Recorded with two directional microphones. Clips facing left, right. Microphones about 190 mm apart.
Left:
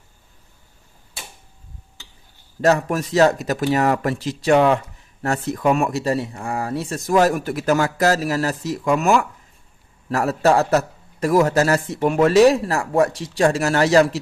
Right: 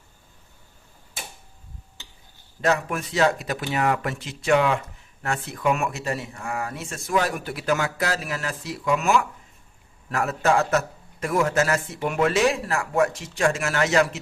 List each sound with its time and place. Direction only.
2.6 s a man's voice: 40° left (ahead or behind)